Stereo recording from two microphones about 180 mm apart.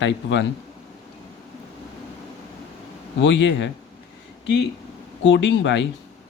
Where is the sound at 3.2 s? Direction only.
85° left.